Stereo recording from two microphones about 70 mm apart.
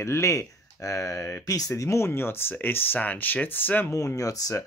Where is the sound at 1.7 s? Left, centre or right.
Left.